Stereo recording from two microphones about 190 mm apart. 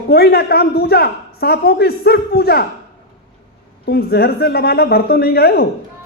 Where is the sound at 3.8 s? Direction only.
55° left (ahead or behind).